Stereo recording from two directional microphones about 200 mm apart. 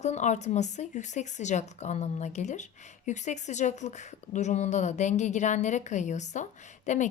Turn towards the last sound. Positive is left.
turn(degrees=35)  # may be behind; listen again after turning